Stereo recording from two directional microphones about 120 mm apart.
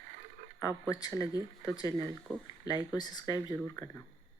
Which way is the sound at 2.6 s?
35° left (ahead or behind).